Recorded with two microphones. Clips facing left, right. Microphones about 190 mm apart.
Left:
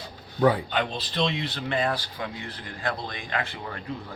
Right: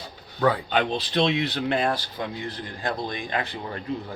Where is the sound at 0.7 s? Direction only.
70° right (ahead or behind).